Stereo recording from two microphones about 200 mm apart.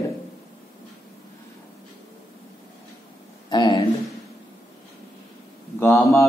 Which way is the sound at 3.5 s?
20° left (ahead or behind).